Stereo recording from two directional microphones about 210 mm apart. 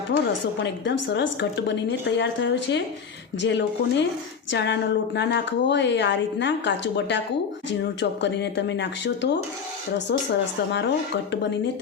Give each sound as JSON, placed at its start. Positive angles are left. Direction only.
{"t": 0.1, "sound": "a woman's voice", "side_deg": 50}